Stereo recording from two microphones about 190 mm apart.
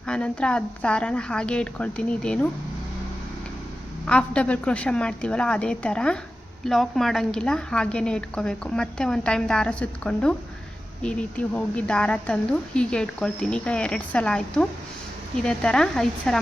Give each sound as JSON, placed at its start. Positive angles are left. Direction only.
{"t": 0.1, "sound": "a woman's voice", "side_deg": 5}
{"t": 4.0, "sound": "a woman's voice", "side_deg": 5}